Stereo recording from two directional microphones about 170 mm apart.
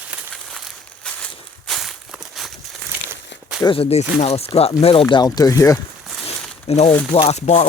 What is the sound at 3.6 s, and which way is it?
Speech, 30° left (ahead or behind).